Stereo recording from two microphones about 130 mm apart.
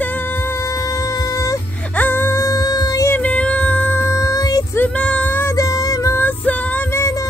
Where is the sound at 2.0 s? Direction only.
15° left (ahead or behind).